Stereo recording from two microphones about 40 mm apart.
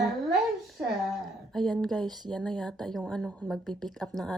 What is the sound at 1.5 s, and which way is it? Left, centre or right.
Speech, centre.